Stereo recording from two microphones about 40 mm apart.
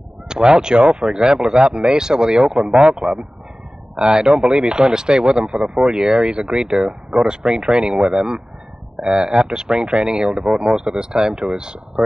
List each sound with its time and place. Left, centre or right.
0.3 s speech: centre